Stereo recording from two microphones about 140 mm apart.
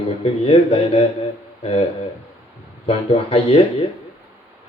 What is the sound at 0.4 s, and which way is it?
Speech, 45° left (ahead or behind).